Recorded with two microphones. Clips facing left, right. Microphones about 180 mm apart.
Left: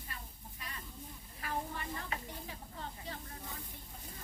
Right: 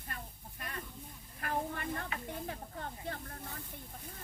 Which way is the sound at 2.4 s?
55° right (ahead or behind).